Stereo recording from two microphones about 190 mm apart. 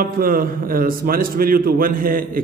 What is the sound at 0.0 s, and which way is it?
A man's voice, 50° right (ahead or behind).